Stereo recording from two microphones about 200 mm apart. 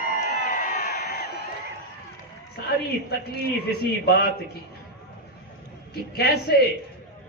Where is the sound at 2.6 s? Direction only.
55° left (ahead or behind).